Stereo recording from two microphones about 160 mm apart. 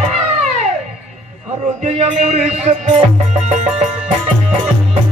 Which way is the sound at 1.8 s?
40° right (ahead or behind).